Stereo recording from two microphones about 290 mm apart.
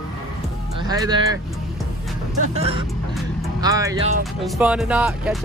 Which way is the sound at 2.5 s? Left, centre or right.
Centre.